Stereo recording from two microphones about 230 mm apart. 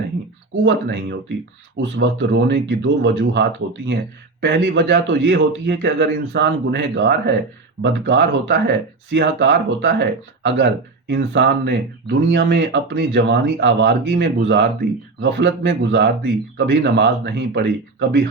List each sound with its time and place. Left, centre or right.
0.6 s speech: right